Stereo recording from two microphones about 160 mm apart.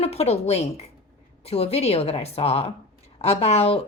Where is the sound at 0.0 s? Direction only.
40° left (ahead or behind).